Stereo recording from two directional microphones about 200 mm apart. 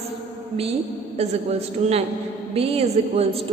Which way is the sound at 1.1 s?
30° right (ahead or behind).